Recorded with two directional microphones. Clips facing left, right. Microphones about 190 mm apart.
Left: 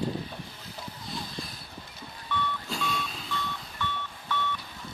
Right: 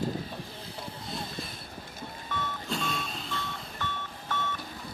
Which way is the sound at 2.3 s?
45° right (ahead or behind).